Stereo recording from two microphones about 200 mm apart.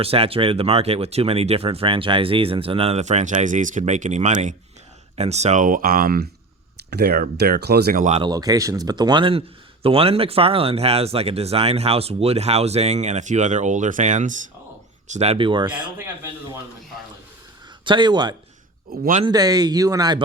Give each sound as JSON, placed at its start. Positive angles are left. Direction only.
{"t": 0.0, "sound": "speech", "side_deg": -30}
{"t": 8.2, "sound": "speech", "side_deg": -20}
{"t": 16.0, "sound": "speech", "side_deg": -10}
{"t": 17.8, "sound": "speech", "side_deg": -25}
{"t": 18.9, "sound": "speech", "side_deg": -45}
{"t": 19.2, "sound": "speech", "side_deg": -20}